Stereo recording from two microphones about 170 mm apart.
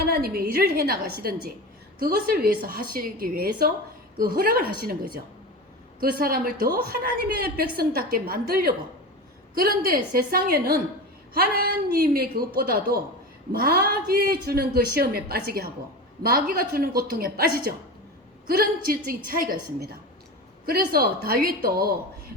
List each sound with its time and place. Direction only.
0.0 s a woman's voice: 60° right (ahead or behind)